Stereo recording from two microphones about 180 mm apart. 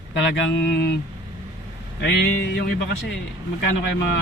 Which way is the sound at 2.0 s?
70° left (ahead or behind).